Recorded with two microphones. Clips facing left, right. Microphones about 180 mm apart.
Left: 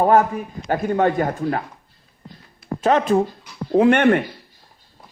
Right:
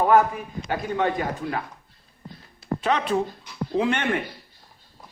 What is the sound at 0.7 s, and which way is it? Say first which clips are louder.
Speech: left 6 dB; 45° left (ahead or behind).